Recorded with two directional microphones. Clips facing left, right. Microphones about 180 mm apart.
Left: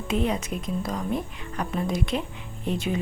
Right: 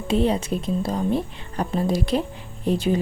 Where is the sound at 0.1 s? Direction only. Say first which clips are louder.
Right 5 dB; 30° right (ahead or behind).